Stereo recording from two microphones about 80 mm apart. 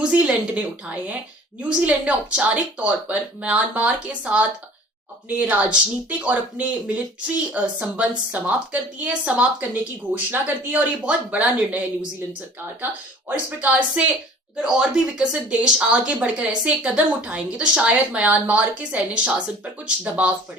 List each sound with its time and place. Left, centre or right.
0.0 s speech: centre
12.8 s speech: right